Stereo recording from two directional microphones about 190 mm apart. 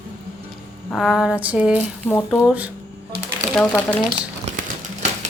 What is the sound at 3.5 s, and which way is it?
Speech, 10° left (ahead or behind).